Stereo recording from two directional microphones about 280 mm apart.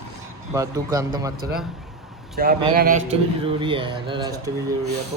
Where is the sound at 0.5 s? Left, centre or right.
Centre.